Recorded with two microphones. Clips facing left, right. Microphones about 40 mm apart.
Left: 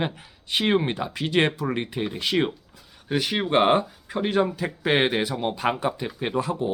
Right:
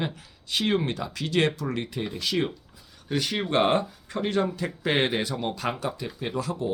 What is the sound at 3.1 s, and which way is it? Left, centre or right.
Speech, left.